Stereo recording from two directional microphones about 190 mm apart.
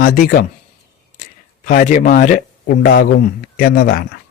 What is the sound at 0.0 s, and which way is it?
Speech, 50° left (ahead or behind).